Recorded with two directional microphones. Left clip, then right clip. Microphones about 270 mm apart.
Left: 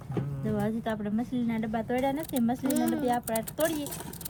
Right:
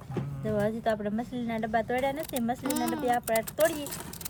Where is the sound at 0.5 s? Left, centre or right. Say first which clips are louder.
Right 4 dB; right.